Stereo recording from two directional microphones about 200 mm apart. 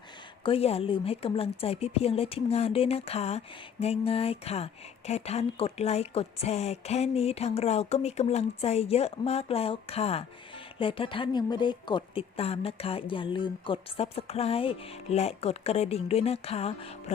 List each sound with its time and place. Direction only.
0.4 s a woman's voice: 30° left (ahead or behind)